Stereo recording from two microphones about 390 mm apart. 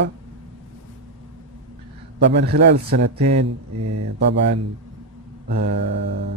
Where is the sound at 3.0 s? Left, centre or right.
Right.